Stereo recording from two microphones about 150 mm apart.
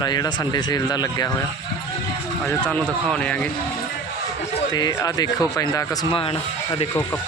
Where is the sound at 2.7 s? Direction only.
5° left (ahead or behind).